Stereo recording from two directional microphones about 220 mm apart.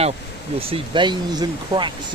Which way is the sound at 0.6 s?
25° right (ahead or behind).